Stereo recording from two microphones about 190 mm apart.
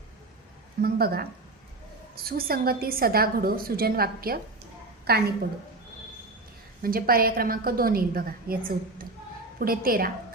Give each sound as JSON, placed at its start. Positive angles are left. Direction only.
{"t": 0.8, "sound": "a woman's voice", "side_deg": -50}
{"t": 6.8, "sound": "a woman's voice", "side_deg": -50}